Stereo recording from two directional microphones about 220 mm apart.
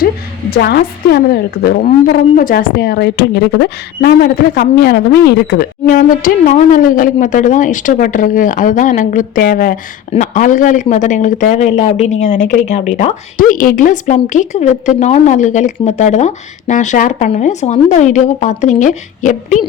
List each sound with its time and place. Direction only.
0.5 s a woman's voice: 45° left (ahead or behind)